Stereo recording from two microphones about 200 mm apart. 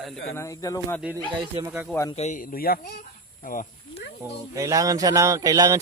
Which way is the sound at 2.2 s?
40° left (ahead or behind).